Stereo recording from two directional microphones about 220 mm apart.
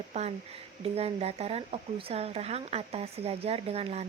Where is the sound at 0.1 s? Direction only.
30° right (ahead or behind).